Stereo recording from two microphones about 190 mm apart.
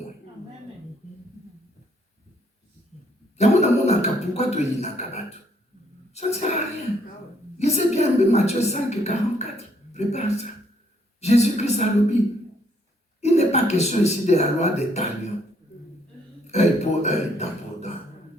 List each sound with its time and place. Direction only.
3.3 s a woman's voice: 35° left (ahead or behind)
7.6 s a woman's voice: 35° left (ahead or behind)
13.2 s speech: 35° left (ahead or behind)
16.5 s speech: 35° left (ahead or behind)